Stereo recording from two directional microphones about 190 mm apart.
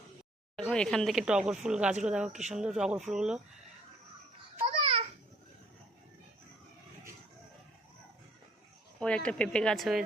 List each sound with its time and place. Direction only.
0.5 s speech: 5° left (ahead or behind)
4.6 s babbling: 30° right (ahead or behind)
9.0 s speech: 5° left (ahead or behind)